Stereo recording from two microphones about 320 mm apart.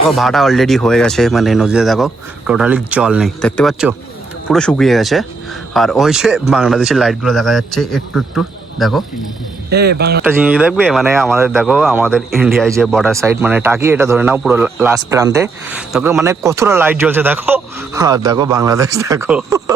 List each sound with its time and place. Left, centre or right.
0.2 s a man's voice: centre
9.6 s speech: right
10.2 s speech: centre